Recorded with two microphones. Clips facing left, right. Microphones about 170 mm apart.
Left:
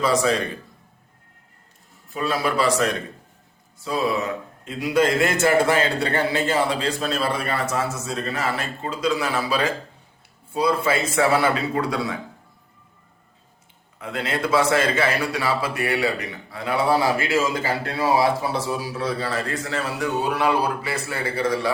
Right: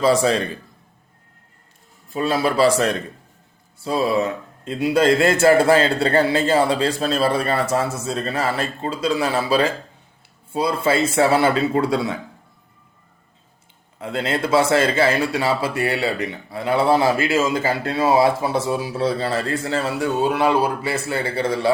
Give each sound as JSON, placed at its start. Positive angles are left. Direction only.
{"t": 0.0, "sound": "a man's voice", "side_deg": -30}
{"t": 2.1, "sound": "a man's voice", "side_deg": -30}
{"t": 14.0, "sound": "a man's voice", "side_deg": -30}